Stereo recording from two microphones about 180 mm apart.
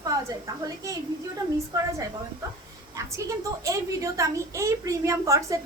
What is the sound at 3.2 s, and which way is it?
A child's voice, 15° right (ahead or behind).